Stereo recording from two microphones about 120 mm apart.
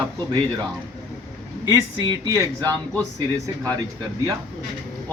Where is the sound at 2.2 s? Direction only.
25° right (ahead or behind).